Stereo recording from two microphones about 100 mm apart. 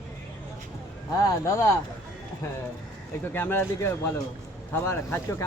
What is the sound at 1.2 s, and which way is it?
Speech, 30° left (ahead or behind).